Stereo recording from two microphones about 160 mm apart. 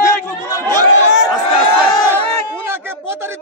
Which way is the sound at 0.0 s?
20° left (ahead or behind).